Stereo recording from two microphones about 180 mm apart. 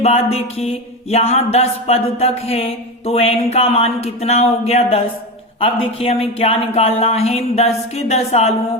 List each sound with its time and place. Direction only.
0.0 s music: 35° left (ahead or behind)